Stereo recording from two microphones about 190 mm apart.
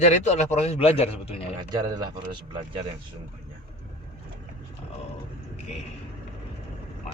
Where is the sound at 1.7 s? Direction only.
20° right (ahead or behind).